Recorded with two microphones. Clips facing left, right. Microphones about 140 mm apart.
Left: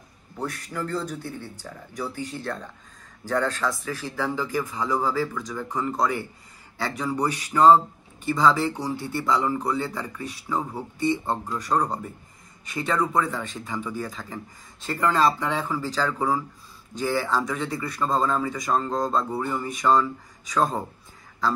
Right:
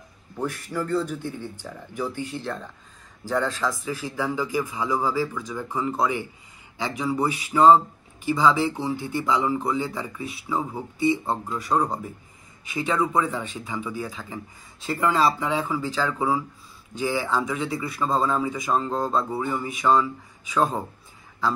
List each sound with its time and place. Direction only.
0.5 s speech: 5° right (ahead or behind)
2.1 s speech: 40° left (ahead or behind)
2.4 s speech: centre (ahead or behind)